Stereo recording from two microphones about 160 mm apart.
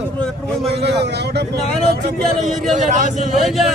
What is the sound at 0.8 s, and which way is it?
Speech, 90° right.